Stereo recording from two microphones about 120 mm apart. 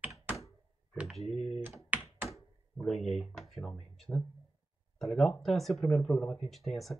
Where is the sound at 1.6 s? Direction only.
15° right (ahead or behind).